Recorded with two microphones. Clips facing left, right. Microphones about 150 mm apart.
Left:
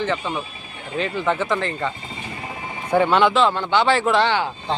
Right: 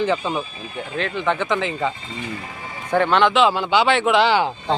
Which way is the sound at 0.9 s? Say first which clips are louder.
Left 1 dB; 5° left (ahead or behind).